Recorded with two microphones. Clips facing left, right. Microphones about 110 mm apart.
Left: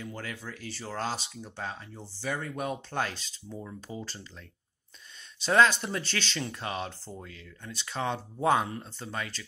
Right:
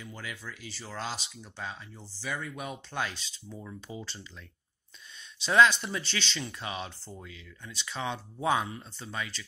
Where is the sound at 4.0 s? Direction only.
40° left (ahead or behind).